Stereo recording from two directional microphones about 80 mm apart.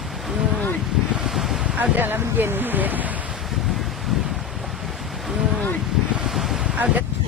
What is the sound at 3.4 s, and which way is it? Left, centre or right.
Wind noise, centre.